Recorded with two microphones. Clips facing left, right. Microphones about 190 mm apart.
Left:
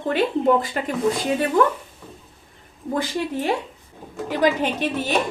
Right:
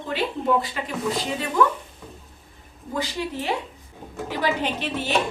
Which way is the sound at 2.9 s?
50° left (ahead or behind).